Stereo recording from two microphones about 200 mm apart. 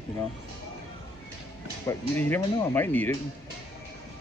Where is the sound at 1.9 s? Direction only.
10° left (ahead or behind).